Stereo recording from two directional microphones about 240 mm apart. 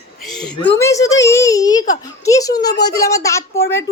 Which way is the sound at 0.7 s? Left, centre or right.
Centre.